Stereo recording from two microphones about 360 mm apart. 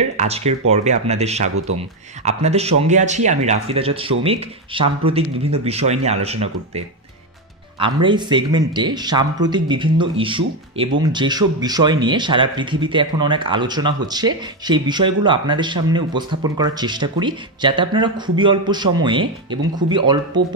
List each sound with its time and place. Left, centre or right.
0.2 s speech: centre
7.8 s speech: centre